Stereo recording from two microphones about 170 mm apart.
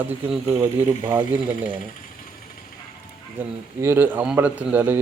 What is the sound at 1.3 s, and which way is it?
Speech, 10° right (ahead or behind).